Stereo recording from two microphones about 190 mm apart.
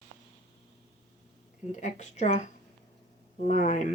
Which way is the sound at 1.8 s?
40° left (ahead or behind).